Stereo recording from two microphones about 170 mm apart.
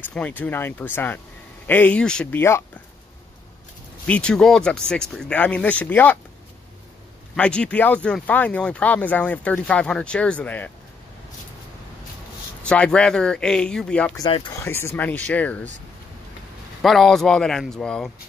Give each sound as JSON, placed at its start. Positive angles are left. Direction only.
{"t": 0.1, "sound": "speech", "side_deg": 10}
{"t": 4.1, "sound": "speech", "side_deg": 5}
{"t": 7.3, "sound": "speech", "side_deg": 5}
{"t": 12.6, "sound": "speech", "side_deg": 5}
{"t": 14.1, "sound": "speech", "side_deg": 25}
{"t": 14.6, "sound": "speech", "side_deg": 15}
{"t": 16.8, "sound": "speech", "side_deg": 0}